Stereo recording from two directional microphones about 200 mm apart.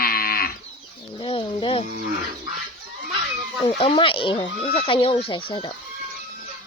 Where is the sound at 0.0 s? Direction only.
45° left (ahead or behind).